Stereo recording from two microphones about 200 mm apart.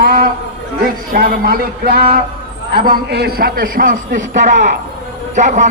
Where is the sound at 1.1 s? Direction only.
45° right (ahead or behind).